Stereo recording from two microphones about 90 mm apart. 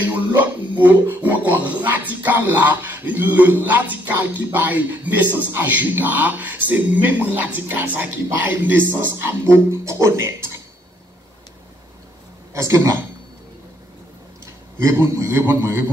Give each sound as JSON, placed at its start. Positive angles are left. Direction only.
{"t": 0.3, "sound": "speech", "side_deg": -20}
{"t": 12.5, "sound": "a man's voice", "side_deg": -35}
{"t": 14.4, "sound": "a man's voice", "side_deg": -35}